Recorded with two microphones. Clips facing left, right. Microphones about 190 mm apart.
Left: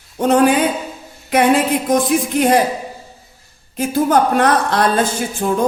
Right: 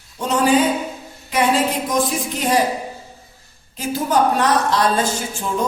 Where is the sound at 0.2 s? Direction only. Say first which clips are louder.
Left 6 dB; 55° left (ahead or behind).